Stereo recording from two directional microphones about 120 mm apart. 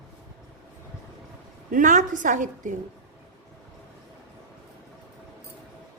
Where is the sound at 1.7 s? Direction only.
90° right.